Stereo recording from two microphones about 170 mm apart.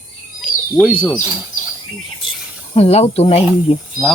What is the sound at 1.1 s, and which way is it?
Speech, 5° right (ahead or behind).